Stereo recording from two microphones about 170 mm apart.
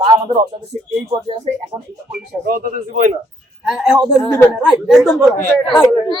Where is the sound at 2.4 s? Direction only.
55° right (ahead or behind).